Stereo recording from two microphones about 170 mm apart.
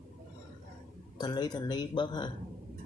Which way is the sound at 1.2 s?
25° left (ahead or behind).